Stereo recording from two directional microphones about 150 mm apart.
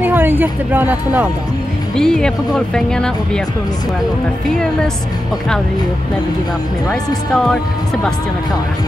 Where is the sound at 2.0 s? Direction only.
5° left (ahead or behind).